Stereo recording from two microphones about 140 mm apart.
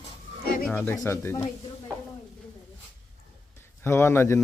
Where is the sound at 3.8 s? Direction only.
20° left (ahead or behind).